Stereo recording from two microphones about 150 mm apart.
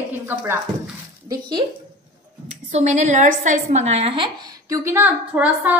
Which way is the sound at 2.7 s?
50° right (ahead or behind).